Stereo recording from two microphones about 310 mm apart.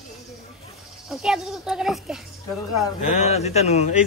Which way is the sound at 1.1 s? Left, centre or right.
Centre.